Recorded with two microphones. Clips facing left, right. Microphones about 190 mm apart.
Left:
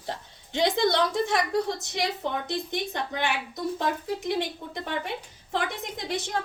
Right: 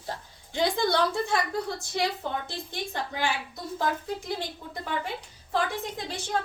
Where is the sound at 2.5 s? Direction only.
20° left (ahead or behind).